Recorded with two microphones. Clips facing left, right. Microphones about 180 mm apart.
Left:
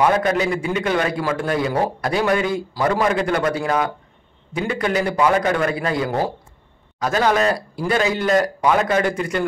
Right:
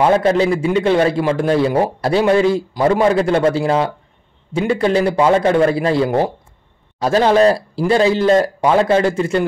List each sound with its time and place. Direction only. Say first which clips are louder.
0.0 s a man's voice: right 4 dB; 25° right (ahead or behind)